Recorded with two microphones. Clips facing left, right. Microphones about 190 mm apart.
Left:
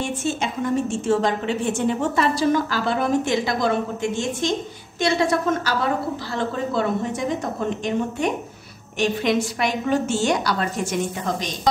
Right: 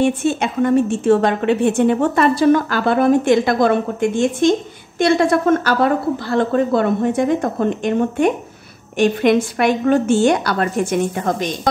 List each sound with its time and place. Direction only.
0.0 s a woman's voice: 60° right (ahead or behind)